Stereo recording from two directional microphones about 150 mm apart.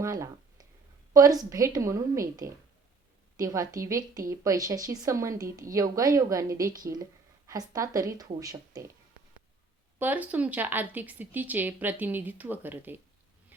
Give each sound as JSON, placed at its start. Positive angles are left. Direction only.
{"t": 0.0, "sound": "a woman's voice", "side_deg": -20}
{"t": 6.7, "sound": "speech", "side_deg": -65}
{"t": 6.9, "sound": "speech", "side_deg": -25}
{"t": 10.0, "sound": "speech", "side_deg": -10}